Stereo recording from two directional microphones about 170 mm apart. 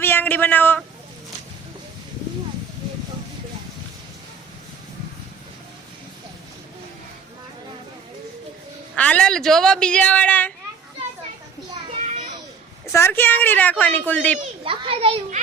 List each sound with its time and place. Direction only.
0.0 s a man's voice: 10° left (ahead or behind)
9.0 s a woman's voice: 5° left (ahead or behind)
12.0 s children playing: 40° right (ahead or behind)
12.9 s a woman's voice: 15° left (ahead or behind)
14.6 s a child's voice: 30° right (ahead or behind)